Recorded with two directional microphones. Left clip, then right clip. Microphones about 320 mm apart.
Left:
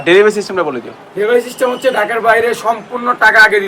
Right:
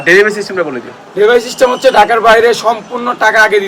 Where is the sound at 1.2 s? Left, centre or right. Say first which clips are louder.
Right 5 dB; centre.